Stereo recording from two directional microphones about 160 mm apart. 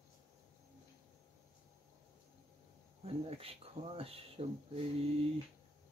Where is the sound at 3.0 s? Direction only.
35° right (ahead or behind).